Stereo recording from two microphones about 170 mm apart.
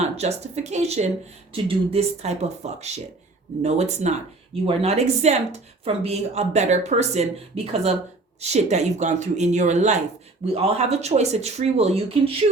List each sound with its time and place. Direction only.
0.0 s a woman's voice: 40° right (ahead or behind)